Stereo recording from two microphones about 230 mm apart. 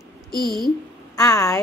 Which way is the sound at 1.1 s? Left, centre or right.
Centre.